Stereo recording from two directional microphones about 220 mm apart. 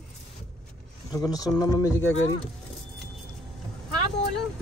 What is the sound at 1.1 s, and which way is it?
Speech, 15° left (ahead or behind).